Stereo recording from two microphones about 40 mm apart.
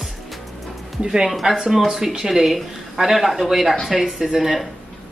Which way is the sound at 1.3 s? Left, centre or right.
Centre.